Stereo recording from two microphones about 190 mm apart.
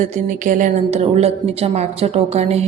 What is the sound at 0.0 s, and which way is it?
A woman's voice, 40° right (ahead or behind).